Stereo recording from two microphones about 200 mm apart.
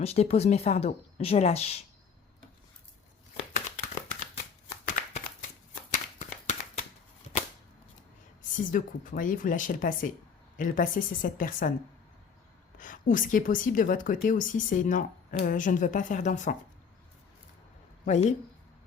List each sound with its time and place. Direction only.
0.0 s a woman's voice: 30° left (ahead or behind)
4.9 s shuffling cards: 40° left (ahead or behind)
5.9 s a sound: 35° left (ahead or behind)
8.4 s speech: 40° left (ahead or behind)
12.7 s a woman's voice: 40° left (ahead or behind)
18.0 s speech: 35° left (ahead or behind)